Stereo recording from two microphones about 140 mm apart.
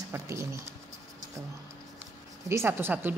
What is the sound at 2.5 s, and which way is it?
Speech, 15° right (ahead or behind).